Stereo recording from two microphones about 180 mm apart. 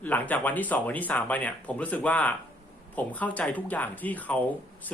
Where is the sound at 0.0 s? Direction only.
10° left (ahead or behind).